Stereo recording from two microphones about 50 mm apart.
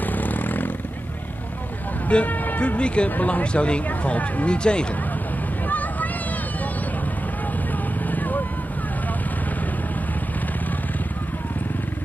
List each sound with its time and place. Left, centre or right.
0.0 s vehicle: left
2.0 s speech: left
2.4 s a sound: left
2.8 s speech: left
3.1 s speech: left
5.7 s vehicle: left
8.1 s vehicle: left